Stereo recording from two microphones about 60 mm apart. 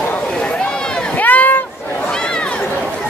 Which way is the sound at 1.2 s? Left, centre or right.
Left.